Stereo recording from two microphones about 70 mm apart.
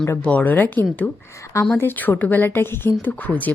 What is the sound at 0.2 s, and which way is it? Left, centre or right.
A woman's voice, left.